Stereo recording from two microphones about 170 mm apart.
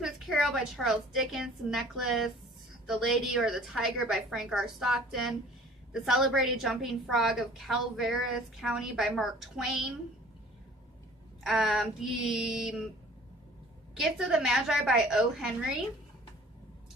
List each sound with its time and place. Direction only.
0.0 s a woman's voice: centre (ahead or behind)
11.4 s a woman's voice: 5° right (ahead or behind)
14.0 s a woman's voice: 5° right (ahead or behind)